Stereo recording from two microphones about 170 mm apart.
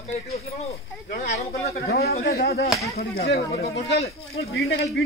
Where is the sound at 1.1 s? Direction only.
50° left (ahead or behind).